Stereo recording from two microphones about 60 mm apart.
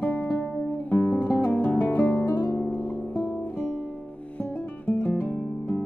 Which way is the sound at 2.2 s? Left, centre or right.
Left.